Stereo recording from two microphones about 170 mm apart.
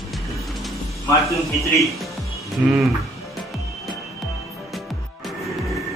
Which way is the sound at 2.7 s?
Centre (ahead or behind).